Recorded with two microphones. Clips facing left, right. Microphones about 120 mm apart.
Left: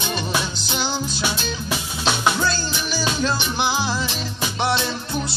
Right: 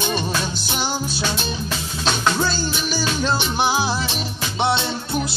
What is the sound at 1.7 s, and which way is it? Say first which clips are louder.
Music: left 3 dB; 15° left (ahead or behind).